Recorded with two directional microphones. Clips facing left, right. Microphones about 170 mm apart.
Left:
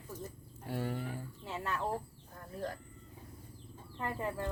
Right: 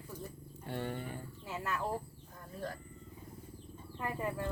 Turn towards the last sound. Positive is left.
turn(degrees=-10)  # may be behind; listen again after turning